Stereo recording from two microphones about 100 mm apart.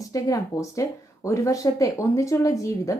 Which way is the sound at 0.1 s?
35° left (ahead or behind).